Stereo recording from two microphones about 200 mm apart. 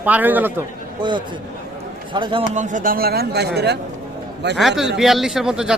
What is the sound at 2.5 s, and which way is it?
Speech, 40° right (ahead or behind).